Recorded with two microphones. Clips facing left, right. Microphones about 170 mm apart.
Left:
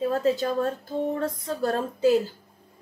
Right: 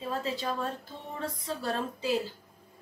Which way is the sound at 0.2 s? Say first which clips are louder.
Left 9 dB; 45° left (ahead or behind).